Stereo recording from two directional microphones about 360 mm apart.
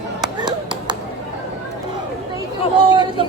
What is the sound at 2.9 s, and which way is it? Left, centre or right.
Speech, centre.